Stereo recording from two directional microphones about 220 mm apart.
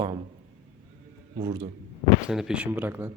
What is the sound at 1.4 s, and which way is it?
Speech, 20° right (ahead or behind).